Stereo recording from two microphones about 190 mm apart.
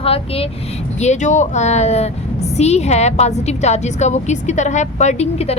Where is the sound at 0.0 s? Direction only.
30° left (ahead or behind).